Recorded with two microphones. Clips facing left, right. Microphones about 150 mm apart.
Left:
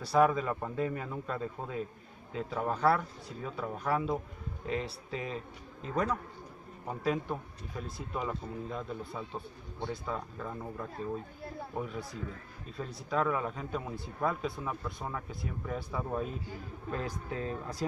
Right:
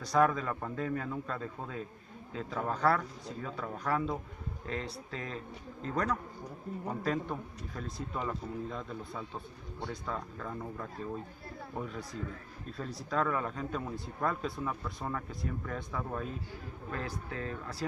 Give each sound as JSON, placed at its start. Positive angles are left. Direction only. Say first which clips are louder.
{"t": 0.0, "sound": "speech", "louder": "left 2 dB", "side_deg": 5}
{"t": 12.7, "sound": "speech", "louder": "left 1 dB", "side_deg": 0}